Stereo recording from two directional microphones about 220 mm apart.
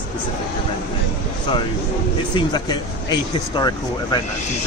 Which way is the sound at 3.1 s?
20° left (ahead or behind).